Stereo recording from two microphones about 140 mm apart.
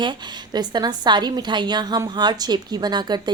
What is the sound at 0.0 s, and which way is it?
A woman's voice, 30° right (ahead or behind).